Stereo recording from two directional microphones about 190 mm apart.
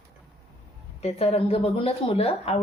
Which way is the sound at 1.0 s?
30° left (ahead or behind).